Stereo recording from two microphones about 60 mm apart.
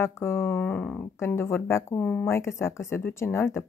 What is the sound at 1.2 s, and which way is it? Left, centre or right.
Speech, left.